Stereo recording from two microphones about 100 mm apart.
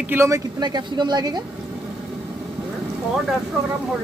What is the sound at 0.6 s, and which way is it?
Speech, 45° right (ahead or behind).